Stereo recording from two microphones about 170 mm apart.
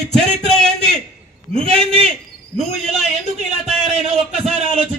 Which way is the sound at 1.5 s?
35° right (ahead or behind).